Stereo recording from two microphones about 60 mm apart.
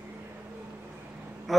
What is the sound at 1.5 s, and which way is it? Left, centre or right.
Quack, centre.